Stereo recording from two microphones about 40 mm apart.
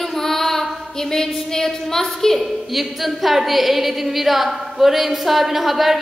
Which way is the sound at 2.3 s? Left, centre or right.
Centre.